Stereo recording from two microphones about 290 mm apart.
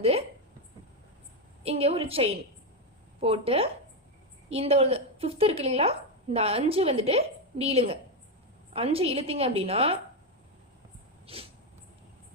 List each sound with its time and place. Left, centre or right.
1.6 s a woman's voice: right
11.3 s a woman's voice: centre